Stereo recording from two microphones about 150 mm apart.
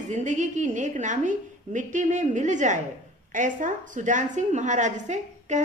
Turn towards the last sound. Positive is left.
turn(degrees=-50)  # may be behind; listen again after turning